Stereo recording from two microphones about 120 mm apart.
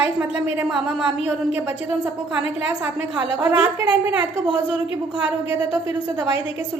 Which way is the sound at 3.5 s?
15° right (ahead or behind).